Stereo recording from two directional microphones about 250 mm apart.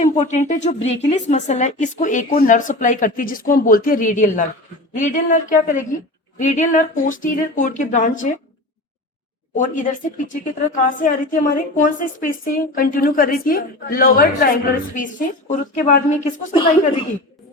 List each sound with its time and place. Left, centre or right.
0.0 s a woman's voice: left
9.6 s a woman's voice: left